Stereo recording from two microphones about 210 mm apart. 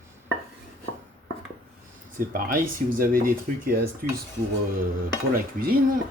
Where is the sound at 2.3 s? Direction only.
40° right (ahead or behind).